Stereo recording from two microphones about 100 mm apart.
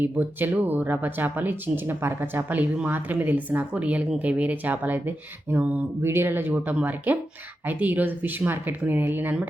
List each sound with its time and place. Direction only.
0.0 s speech: 20° right (ahead or behind)